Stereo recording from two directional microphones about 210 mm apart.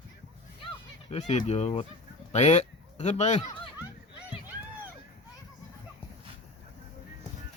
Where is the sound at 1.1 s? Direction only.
30° left (ahead or behind).